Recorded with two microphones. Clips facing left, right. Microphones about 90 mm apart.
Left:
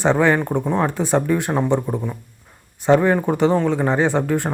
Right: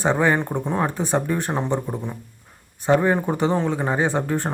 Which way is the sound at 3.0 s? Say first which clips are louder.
Left 3 dB; 15° right (ahead or behind).